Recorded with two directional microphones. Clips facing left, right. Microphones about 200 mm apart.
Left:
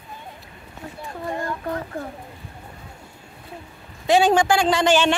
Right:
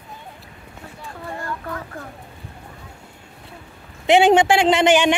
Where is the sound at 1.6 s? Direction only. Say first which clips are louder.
Left 4 dB; 30° left (ahead or behind).